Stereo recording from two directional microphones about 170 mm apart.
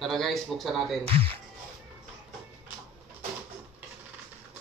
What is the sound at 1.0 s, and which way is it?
Speech, 35° right (ahead or behind).